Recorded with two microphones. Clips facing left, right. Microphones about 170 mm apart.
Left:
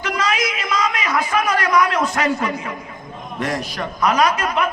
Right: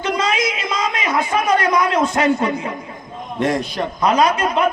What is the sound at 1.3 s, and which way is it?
A man's voice, 25° right (ahead or behind).